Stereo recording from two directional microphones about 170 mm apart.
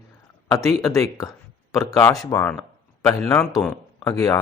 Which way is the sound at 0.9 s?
20° left (ahead or behind).